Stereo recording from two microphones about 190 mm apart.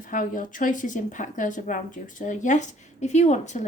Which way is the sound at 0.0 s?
45° left (ahead or behind).